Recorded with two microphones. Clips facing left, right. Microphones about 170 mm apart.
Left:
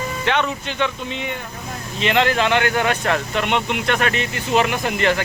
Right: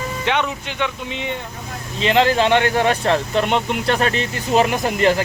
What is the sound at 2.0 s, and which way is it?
Speech, 35° right (ahead or behind).